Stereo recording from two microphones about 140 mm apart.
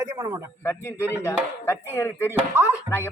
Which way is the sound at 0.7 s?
20° left (ahead or behind).